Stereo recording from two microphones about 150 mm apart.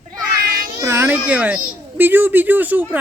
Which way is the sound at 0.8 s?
15° right (ahead or behind).